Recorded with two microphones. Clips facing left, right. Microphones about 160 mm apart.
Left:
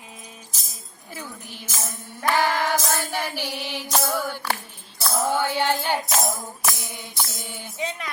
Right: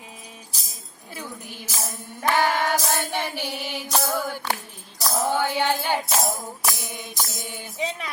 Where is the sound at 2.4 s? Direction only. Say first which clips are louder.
Even; 15° right (ahead or behind).